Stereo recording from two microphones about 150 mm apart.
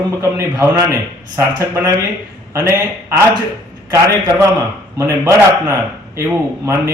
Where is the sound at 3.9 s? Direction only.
20° right (ahead or behind).